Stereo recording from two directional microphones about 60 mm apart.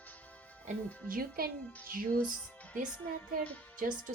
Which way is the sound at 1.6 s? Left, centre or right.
Left.